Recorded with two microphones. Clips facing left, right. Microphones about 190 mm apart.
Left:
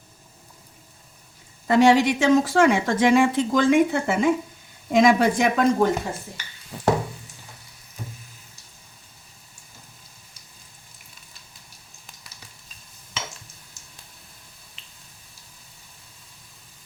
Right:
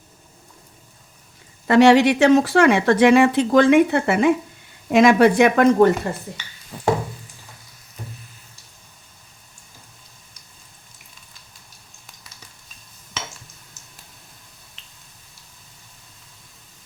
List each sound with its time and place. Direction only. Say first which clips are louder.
1.6 s speech: right 4 dB; 70° right (ahead or behind)